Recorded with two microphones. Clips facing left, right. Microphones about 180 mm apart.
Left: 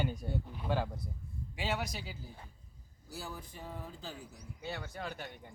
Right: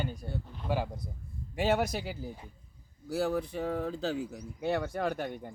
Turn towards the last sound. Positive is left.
turn(degrees=-50)  # may be behind; listen again after turning